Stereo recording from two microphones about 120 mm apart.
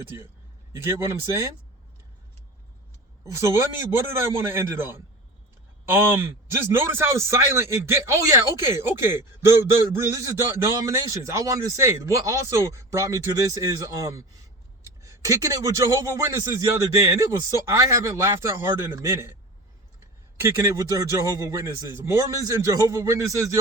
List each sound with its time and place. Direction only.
0.7 s a man's voice: 25° right (ahead or behind)
3.3 s a man's voice: 20° right (ahead or behind)
6.7 s a man's voice: 20° right (ahead or behind)
20.4 s a man's voice: 25° right (ahead or behind)